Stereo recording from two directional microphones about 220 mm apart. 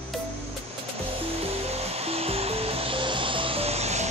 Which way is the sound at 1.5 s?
30° right (ahead or behind).